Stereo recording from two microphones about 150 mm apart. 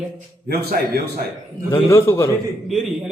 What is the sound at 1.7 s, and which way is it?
Speech, 20° left (ahead or behind).